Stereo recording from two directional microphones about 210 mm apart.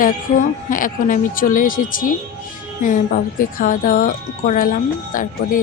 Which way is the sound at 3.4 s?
40° left (ahead or behind).